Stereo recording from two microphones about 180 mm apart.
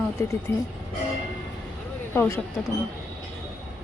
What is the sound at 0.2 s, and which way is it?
Speech, 15° left (ahead or behind).